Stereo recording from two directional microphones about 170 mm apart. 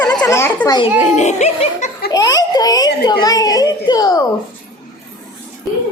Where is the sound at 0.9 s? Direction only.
40° left (ahead or behind).